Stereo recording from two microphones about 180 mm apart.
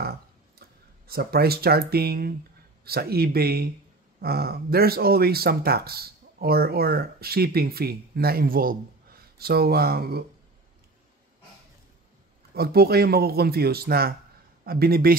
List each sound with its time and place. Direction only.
0.6 s speech: 60° right (ahead or behind)
12.5 s speech: 60° right (ahead or behind)